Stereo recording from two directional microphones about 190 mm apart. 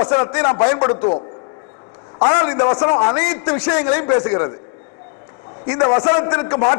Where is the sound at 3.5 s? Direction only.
10° left (ahead or behind).